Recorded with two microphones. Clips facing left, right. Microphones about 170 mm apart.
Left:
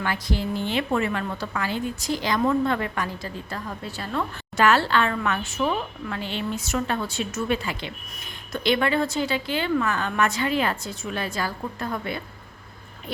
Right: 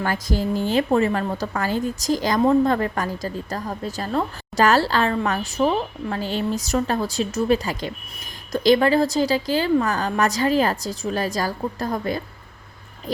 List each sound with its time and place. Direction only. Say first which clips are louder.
0.0 s a woman's voice: right 4 dB; 40° right (ahead or behind)